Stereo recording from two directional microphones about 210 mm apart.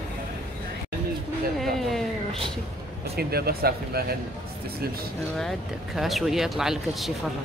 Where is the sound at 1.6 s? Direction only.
Centre (ahead or behind).